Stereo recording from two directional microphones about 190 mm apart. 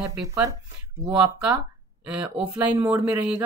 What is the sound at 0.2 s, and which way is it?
Speech, 15° right (ahead or behind).